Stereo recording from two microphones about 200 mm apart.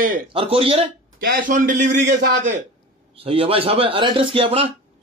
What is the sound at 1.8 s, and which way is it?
Speech, 60° right (ahead or behind).